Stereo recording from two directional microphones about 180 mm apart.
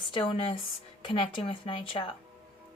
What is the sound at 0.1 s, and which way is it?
A woman's voice, 30° left (ahead or behind).